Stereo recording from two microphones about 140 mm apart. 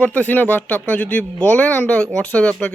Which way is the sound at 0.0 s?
10° left (ahead or behind).